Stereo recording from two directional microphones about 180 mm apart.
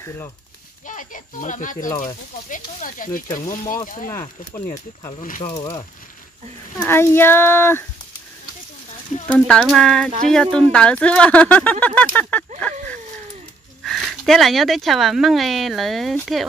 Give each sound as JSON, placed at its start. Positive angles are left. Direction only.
{"t": 0.0, "sound": "speech", "side_deg": 15}
{"t": 0.8, "sound": "speech", "side_deg": 45}
{"t": 3.6, "sound": "speech", "side_deg": 20}
{"t": 5.2, "sound": "speech", "side_deg": 45}
{"t": 5.5, "sound": "speech", "side_deg": 25}
{"t": 6.8, "sound": "speech", "side_deg": 15}
{"t": 9.3, "sound": "speech", "side_deg": 5}
{"t": 13.8, "sound": "speech", "side_deg": 0}